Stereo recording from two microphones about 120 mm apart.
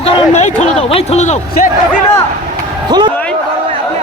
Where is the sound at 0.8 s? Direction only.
55° left (ahead or behind); by 1.7 s 70° left (ahead or behind).